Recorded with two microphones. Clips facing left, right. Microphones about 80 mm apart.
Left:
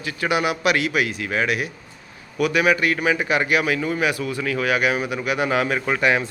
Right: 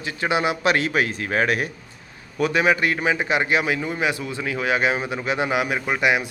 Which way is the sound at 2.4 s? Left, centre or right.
Right.